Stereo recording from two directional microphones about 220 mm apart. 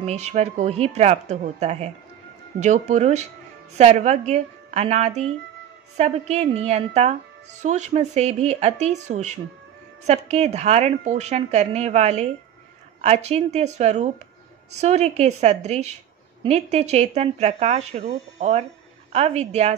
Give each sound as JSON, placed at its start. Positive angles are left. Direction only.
{"t": 0.0, "sound": "a woman's voice", "side_deg": -30}